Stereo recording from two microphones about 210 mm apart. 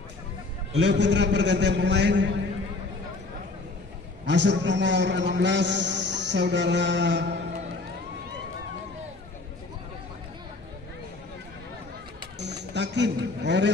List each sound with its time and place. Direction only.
0.7 s a man's voice: 55° right (ahead or behind)
4.3 s a man's voice: 60° right (ahead or behind)
12.4 s speech: 55° right (ahead or behind)